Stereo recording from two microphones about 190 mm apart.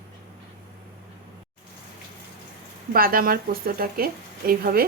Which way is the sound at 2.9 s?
50° right (ahead or behind).